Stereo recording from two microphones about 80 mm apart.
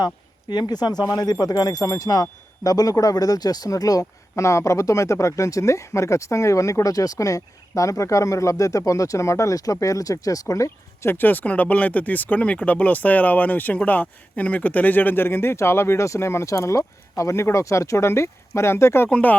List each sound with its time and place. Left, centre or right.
0.5 s speech: left
11.1 s speech: left
19.1 s speech: left